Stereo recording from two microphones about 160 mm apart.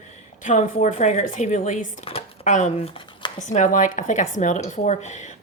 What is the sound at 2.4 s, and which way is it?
Speech, 50° left (ahead or behind).